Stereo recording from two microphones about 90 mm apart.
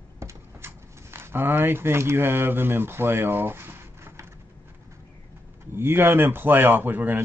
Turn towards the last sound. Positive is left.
turn(degrees=-20)  # may be behind; listen again after turning